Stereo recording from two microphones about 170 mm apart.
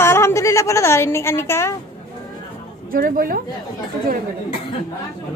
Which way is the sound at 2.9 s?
55° right (ahead or behind).